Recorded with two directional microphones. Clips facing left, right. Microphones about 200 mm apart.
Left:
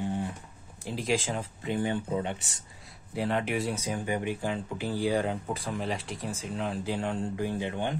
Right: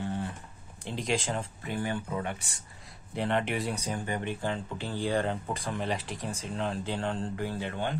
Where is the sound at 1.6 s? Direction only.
20° left (ahead or behind).